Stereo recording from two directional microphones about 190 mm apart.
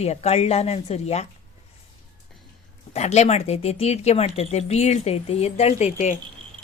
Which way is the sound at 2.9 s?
35° left (ahead or behind).